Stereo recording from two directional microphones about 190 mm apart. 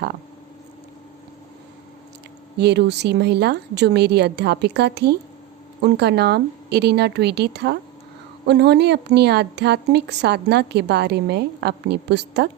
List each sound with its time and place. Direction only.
2.6 s a woman's voice: 60° right (ahead or behind)